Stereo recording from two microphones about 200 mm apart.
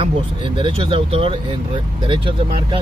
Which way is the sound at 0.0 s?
25° right (ahead or behind).